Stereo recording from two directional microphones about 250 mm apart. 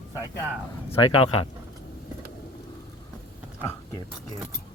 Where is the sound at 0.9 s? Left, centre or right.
Left.